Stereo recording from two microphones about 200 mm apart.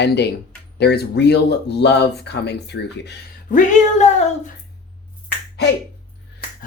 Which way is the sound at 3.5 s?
35° left (ahead or behind).